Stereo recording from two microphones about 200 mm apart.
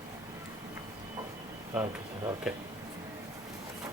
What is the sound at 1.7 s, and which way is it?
Speech, 15° right (ahead or behind).